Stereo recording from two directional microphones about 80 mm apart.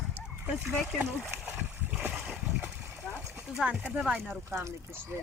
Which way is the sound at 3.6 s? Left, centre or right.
Centre.